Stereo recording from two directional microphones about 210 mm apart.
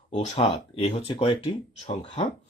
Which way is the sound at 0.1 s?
30° left (ahead or behind).